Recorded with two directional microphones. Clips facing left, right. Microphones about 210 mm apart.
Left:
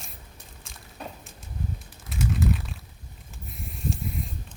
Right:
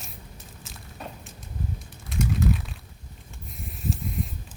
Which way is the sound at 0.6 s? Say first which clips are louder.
Even; centre (ahead or behind).